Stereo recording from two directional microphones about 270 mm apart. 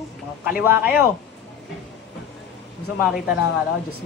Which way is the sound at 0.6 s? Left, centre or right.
Centre.